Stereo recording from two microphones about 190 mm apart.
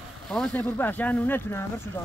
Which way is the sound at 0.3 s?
5° left (ahead or behind).